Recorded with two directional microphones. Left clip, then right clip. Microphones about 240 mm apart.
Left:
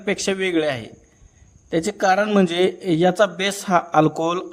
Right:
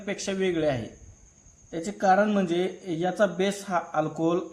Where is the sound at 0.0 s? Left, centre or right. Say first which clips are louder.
Left 7 dB; left.